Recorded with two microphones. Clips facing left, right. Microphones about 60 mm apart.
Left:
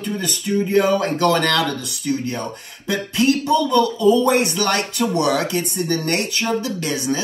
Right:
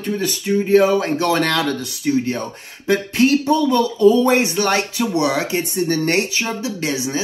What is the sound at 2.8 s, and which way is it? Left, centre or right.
Speech, right.